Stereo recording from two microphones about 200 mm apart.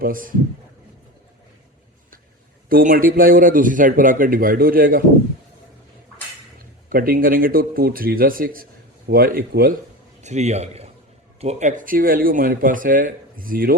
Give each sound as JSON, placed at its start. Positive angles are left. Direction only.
{"t": 0.0, "sound": "speech", "side_deg": -45}
{"t": 2.6, "sound": "speech", "side_deg": -45}
{"t": 6.9, "sound": "speech", "side_deg": -45}
{"t": 10.2, "sound": "a man's voice", "side_deg": -35}